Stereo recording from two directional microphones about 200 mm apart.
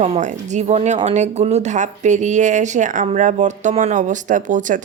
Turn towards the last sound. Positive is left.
turn(degrees=-40)  # may be behind; listen again after turning